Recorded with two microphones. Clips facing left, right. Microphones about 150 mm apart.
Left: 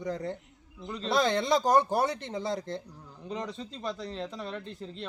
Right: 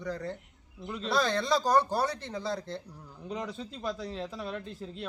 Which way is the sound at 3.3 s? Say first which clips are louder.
Even; centre (ahead or behind).